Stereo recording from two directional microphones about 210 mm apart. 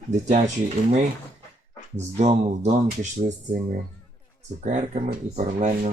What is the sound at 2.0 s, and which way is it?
Speech, 35° right (ahead or behind).